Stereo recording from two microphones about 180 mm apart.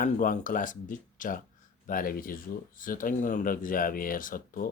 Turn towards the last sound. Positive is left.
turn(degrees=50)  # may be behind; listen again after turning